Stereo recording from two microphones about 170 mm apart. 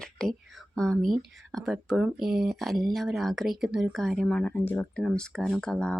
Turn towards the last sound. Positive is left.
turn(degrees=5)  # may be behind; listen again after turning